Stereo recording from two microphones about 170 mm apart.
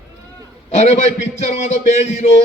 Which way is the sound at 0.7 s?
45° left (ahead or behind).